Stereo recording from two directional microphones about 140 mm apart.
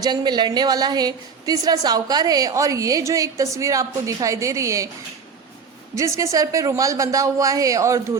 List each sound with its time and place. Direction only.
0.0 s a woman's voice: 30° right (ahead or behind)
5.9 s a woman's voice: 20° right (ahead or behind)